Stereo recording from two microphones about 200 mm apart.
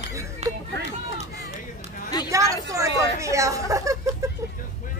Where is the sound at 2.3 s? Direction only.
15° right (ahead or behind).